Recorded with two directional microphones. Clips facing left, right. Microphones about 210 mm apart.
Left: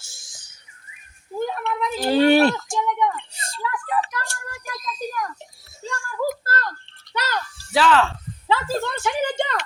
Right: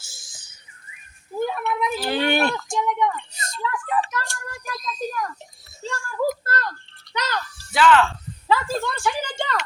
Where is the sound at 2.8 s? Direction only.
20° right (ahead or behind).